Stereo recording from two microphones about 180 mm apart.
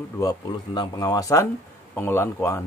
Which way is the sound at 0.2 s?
25° left (ahead or behind).